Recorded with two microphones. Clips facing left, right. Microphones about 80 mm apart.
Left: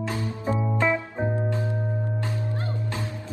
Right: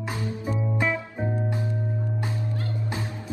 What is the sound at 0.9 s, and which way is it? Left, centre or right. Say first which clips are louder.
Music: left 3 dB; left.